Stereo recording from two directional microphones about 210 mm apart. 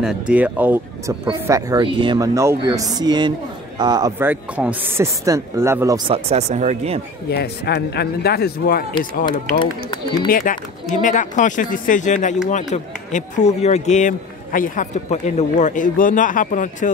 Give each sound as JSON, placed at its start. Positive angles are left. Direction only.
{"t": 0.0, "sound": "a man's voice", "side_deg": -5}
{"t": 1.2, "sound": "a man's voice", "side_deg": -20}
{"t": 6.0, "sound": "speech", "side_deg": -30}
{"t": 7.2, "sound": "a man's voice", "side_deg": 50}
{"t": 10.2, "sound": "speech", "side_deg": 40}